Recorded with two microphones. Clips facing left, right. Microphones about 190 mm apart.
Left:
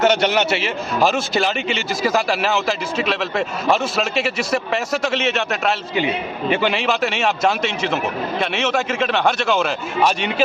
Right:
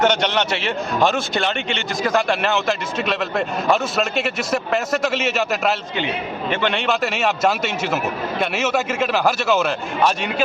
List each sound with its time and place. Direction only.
0.0 s a man's voice: 5° left (ahead or behind)
6.5 s a man's voice: 10° left (ahead or behind)